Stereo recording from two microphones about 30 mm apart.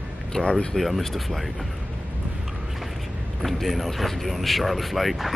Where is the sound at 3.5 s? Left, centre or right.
Centre.